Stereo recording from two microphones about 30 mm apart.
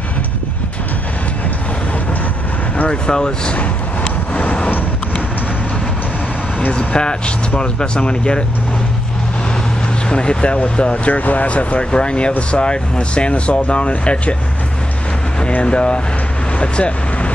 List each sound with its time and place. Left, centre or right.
2.9 s speech: left
3.5 s vehicle: left
6.8 s speech: left
10.0 s speech: left
11.1 s speech: left
11.9 s speech: left
15.6 s speech: left